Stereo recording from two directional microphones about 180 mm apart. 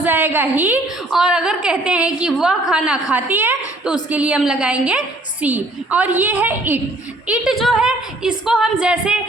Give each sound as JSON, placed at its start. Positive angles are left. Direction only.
{"t": 0.0, "sound": "a woman's voice", "side_deg": -10}